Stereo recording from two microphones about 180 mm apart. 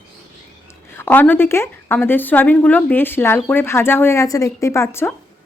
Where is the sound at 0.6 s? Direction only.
15° left (ahead or behind).